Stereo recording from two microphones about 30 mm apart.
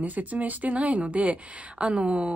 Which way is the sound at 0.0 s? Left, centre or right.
Right.